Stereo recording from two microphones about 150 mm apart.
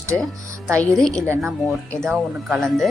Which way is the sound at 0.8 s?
5° left (ahead or behind).